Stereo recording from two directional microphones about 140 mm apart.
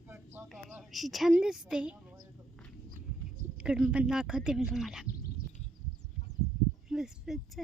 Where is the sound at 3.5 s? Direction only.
5° right (ahead or behind).